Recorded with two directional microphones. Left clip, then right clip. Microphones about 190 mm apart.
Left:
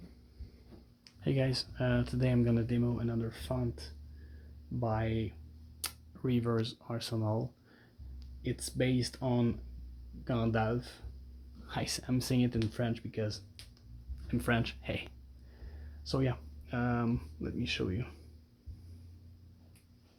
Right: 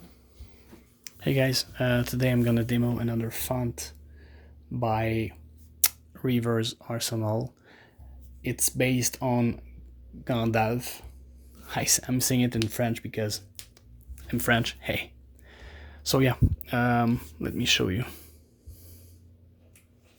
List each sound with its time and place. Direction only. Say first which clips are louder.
1.0 s speech: right 8 dB; 35° right (ahead or behind)
8.4 s speech: right 7 dB; 35° right (ahead or behind)
15.5 s speech: right 11 dB; 45° right (ahead or behind)